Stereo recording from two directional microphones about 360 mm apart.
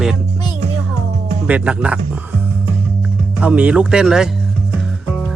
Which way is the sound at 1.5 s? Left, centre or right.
Centre.